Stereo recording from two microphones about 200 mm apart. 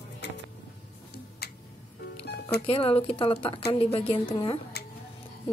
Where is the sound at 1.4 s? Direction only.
55° left (ahead or behind).